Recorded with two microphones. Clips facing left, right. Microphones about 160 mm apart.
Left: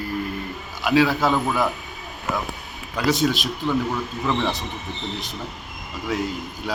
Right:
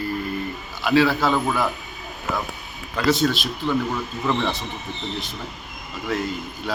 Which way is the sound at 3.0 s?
10° left (ahead or behind).